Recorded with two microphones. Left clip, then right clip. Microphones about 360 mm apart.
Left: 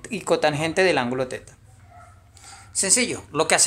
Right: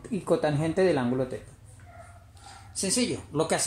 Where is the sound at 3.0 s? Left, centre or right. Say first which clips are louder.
Left 5 dB; left.